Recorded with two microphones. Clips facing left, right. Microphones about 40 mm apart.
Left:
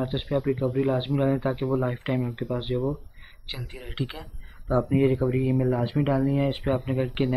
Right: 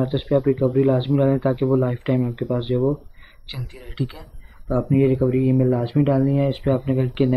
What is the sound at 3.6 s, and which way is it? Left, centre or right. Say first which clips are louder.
Speech: right 4 dB; centre.